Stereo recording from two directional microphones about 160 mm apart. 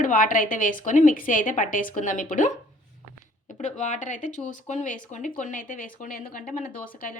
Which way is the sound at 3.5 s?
50° left (ahead or behind).